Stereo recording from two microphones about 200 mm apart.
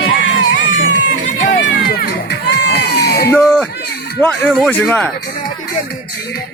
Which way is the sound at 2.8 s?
50° left (ahead or behind).